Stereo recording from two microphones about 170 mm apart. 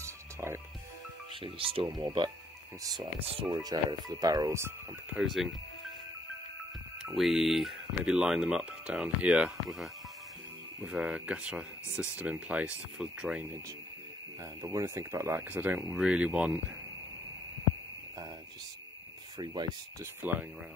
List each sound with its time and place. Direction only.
0.0 s music: 15° right (ahead or behind)
1.4 s speech: 30° right (ahead or behind); by 4.7 s 15° right (ahead or behind)
5.1 s speech: centre (ahead or behind)
7.2 s speech: centre (ahead or behind)
14.4 s speech: 20° right (ahead or behind)
19.3 s speech: 25° right (ahead or behind)